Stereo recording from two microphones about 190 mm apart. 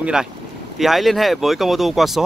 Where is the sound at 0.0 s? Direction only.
5° right (ahead or behind).